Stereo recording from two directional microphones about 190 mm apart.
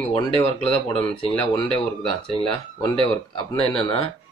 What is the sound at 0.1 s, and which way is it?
Speech, 30° left (ahead or behind).